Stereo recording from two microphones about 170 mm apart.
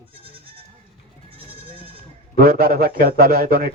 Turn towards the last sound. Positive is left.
turn(degrees=-60)  # may be behind; listen again after turning